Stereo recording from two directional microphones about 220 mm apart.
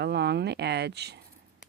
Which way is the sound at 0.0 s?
50° right (ahead or behind).